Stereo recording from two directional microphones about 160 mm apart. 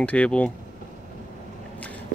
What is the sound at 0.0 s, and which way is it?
Speech, 10° left (ahead or behind).